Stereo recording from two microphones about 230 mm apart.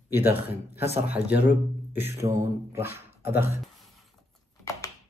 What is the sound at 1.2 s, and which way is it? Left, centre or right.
Speech, left.